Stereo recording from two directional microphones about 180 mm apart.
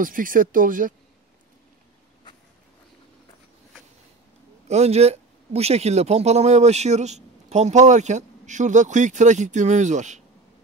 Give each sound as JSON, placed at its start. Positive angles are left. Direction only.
{"t": 0.0, "sound": "speech", "side_deg": -50}
{"t": 4.6, "sound": "speech", "side_deg": -35}